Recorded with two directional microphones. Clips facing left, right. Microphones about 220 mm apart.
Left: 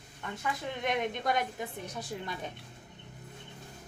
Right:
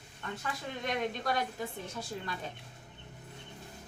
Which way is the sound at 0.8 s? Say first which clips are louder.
Left 2 dB; 20° left (ahead or behind).